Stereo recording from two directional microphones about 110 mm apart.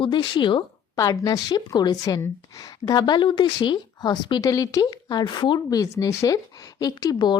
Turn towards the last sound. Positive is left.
turn(degrees=40)  # may be behind; listen again after turning